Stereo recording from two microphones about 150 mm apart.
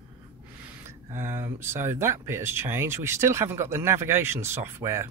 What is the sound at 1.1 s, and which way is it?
Speech, 15° right (ahead or behind).